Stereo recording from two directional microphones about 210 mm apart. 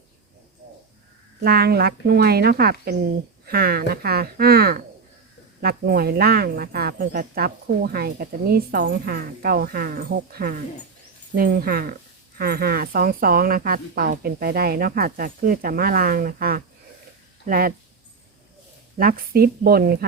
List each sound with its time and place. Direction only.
1.5 s speech: 50° right (ahead or behind)
18.9 s speech: 45° right (ahead or behind)